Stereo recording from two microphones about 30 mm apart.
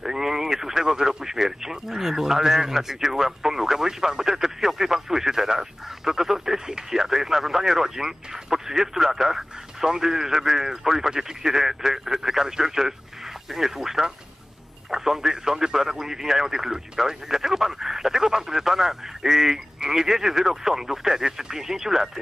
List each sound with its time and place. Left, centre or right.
0.0 s speech: centre